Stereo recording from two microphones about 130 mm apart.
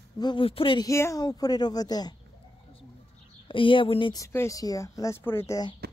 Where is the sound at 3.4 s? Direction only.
40° left (ahead or behind).